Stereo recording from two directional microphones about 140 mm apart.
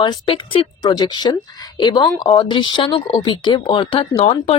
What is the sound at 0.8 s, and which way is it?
A woman's voice, 30° left (ahead or behind).